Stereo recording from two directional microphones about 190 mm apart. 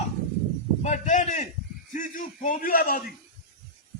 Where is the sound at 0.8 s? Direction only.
40° left (ahead or behind).